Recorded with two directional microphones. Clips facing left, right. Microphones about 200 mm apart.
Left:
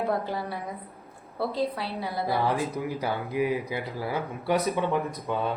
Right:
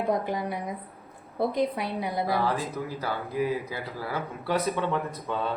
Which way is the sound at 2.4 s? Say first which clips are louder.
Left 2 dB; 15° left (ahead or behind).